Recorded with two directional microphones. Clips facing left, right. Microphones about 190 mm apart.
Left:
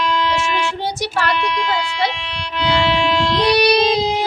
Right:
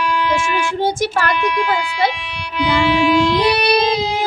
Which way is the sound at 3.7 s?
55° right (ahead or behind).